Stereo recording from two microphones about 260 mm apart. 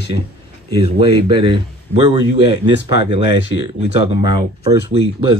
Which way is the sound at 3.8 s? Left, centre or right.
Centre.